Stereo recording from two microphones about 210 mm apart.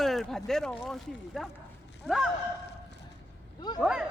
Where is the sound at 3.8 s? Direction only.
Centre (ahead or behind).